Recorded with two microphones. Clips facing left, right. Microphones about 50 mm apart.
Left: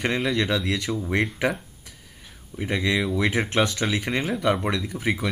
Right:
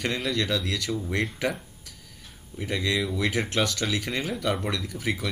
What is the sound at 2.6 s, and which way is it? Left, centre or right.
Speech, left.